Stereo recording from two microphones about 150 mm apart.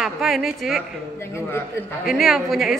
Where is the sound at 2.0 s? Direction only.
Centre (ahead or behind).